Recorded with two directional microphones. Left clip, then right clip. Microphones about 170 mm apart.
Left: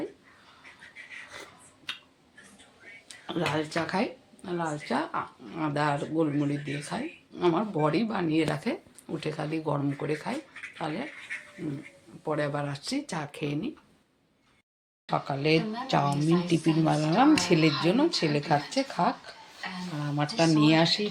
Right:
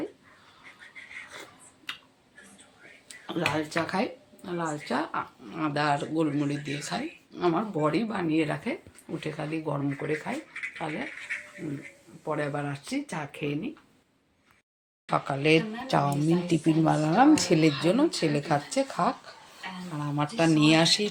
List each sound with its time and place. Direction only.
1.9 s a sound: 10° left (ahead or behind)
3.1 s speech: 10° left (ahead or behind)
11.6 s speech: 15° left (ahead or behind)
15.1 s speech: 5° right (ahead or behind)